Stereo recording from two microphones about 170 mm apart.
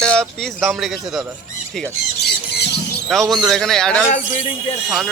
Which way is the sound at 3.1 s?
Centre (ahead or behind).